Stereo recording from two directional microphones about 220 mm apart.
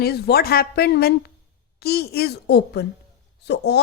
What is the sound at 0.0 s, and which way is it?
A man's voice, 45° left (ahead or behind).